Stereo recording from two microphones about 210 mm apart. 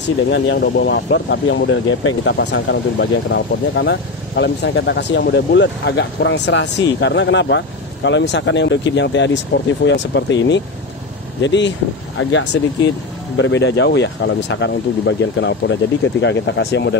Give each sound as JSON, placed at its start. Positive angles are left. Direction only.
{"t": 0.3, "sound": "speech", "side_deg": 55}